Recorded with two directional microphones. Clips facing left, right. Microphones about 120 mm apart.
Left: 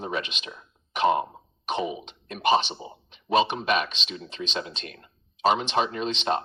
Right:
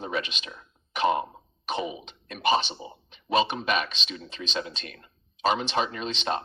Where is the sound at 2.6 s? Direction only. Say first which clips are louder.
Left 1 dB; 40° right (ahead or behind).